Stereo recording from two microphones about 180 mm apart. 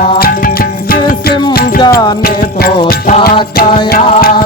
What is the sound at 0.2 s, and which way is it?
Music, 55° left (ahead or behind).